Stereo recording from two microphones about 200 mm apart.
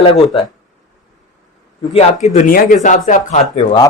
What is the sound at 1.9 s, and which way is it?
Speech, 30° left (ahead or behind).